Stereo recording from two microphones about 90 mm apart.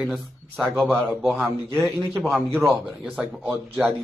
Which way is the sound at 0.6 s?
5° left (ahead or behind).